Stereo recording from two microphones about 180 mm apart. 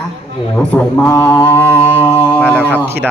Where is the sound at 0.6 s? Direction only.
10° left (ahead or behind).